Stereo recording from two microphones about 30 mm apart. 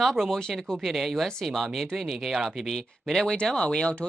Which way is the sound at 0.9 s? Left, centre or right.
Centre.